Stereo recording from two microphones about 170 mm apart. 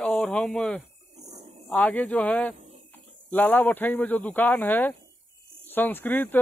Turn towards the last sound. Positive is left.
turn(degrees=10)  # may be behind; listen again after turning